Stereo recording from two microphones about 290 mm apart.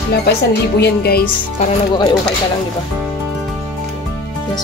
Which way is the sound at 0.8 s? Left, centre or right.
Left.